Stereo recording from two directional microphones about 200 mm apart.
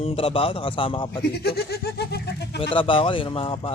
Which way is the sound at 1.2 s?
50° left (ahead or behind).